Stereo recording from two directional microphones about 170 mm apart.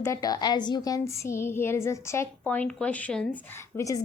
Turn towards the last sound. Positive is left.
turn(degrees=15)  # may be behind; listen again after turning